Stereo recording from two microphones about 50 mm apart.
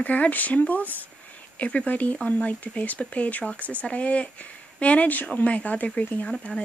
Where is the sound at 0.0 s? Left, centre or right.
Left.